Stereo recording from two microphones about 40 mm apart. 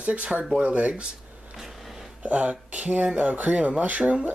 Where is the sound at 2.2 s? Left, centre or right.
Right.